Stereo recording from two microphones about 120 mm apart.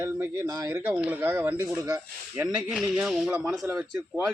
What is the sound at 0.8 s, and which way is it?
Speech, 10° right (ahead or behind).